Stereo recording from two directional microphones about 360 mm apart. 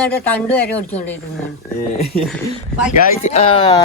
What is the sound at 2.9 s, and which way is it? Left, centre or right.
Speech, centre.